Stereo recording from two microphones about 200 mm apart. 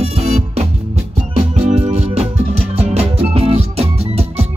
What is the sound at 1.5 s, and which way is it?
Music, 30° right (ahead or behind).